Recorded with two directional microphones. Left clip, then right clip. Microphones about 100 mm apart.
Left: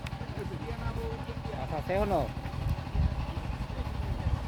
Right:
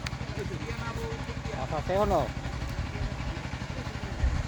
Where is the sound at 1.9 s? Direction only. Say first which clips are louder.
Right 3 dB; 15° right (ahead or behind).